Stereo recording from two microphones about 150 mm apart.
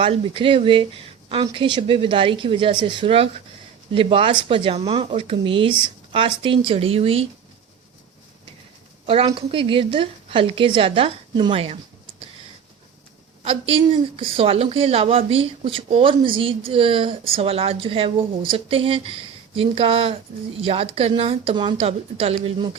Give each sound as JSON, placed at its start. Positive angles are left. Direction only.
{"t": 0.0, "sound": "a woman's voice", "side_deg": -35}
{"t": 9.0, "sound": "a woman's voice", "side_deg": -35}
{"t": 13.4, "sound": "a woman's voice", "side_deg": -40}